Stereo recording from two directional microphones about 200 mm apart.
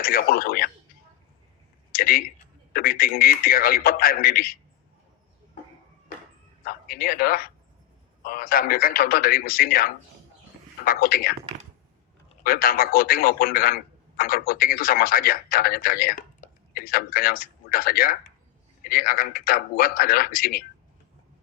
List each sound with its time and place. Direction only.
0.0 s a man's voice: 45° left (ahead or behind)
1.9 s a sound: 45° left (ahead or behind)
2.7 s a man's voice: 45° left (ahead or behind)
6.7 s a man's voice: 50° left (ahead or behind)
12.4 s a man's voice: 45° left (ahead or behind)